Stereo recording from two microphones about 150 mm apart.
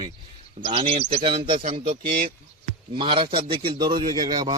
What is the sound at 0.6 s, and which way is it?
Speech, 35° right (ahead or behind).